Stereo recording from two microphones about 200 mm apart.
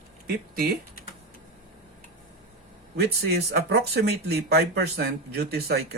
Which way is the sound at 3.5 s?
55° right (ahead or behind).